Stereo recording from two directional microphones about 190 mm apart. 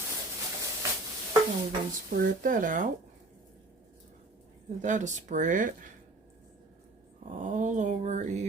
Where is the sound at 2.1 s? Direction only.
50° right (ahead or behind).